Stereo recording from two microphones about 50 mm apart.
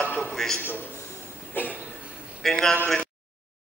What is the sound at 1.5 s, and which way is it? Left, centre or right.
Cough, left.